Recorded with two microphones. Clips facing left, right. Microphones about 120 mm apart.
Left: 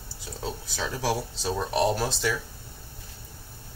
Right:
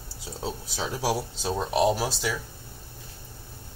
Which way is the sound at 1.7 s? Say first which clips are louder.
Right 2 dB; 10° right (ahead or behind).